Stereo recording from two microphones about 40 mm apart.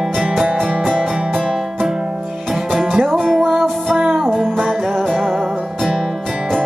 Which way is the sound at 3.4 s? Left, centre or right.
Centre.